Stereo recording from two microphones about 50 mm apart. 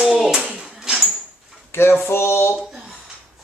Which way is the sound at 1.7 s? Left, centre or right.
Left.